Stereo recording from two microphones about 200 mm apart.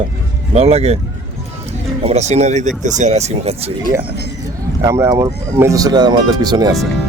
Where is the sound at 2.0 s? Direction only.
35° right (ahead or behind).